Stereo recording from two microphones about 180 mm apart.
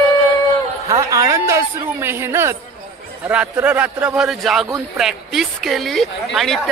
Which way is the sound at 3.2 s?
5° right (ahead or behind).